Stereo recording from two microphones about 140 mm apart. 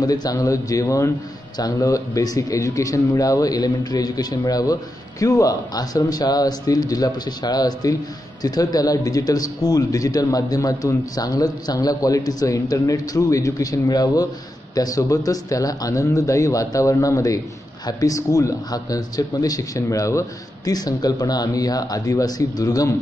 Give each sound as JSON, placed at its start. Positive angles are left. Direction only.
{"t": 0.0, "sound": "speech", "side_deg": 25}